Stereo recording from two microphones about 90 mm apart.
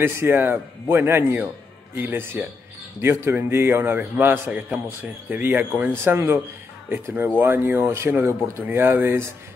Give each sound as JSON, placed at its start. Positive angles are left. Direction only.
{"t": 0.0, "sound": "speech", "side_deg": -25}
{"t": 6.1, "sound": "speech", "side_deg": -30}